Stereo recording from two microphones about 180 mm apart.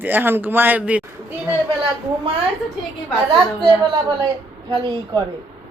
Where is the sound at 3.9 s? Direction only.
25° right (ahead or behind).